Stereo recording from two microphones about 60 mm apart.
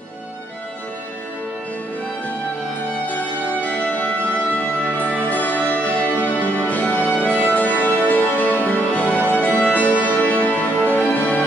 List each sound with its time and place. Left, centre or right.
3.6 s organ: left
4.5 s music: left